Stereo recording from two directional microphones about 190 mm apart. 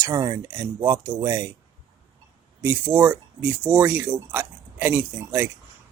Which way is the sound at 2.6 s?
10° right (ahead or behind).